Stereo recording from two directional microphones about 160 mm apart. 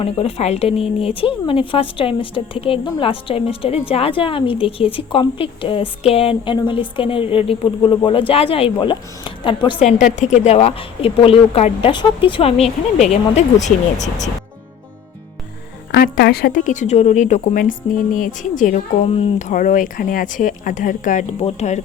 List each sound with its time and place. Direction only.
0.0 s speech: 35° left (ahead or behind)
9.8 s speech: 50° left (ahead or behind)
15.9 s a woman's voice: 85° left; by 18.8 s 55° left (ahead or behind)
19.0 s a woman's voice: 45° left (ahead or behind)
21.4 s speech: 45° left (ahead or behind)